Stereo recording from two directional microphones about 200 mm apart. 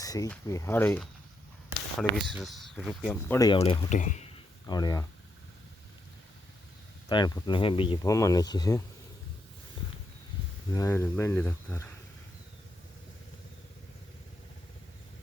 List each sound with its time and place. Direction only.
0.0 s speech: 15° left (ahead or behind)
2.1 s speech: centre (ahead or behind)
3.3 s speech: 20° left (ahead or behind)
3.6 s speech: 30° left (ahead or behind)
4.6 s speech: 20° left (ahead or behind)
7.1 s speech: 20° left (ahead or behind)
10.7 s speech: 15° left (ahead or behind)